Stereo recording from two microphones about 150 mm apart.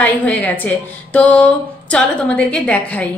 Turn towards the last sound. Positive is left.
turn(degrees=10)  # may be behind; listen again after turning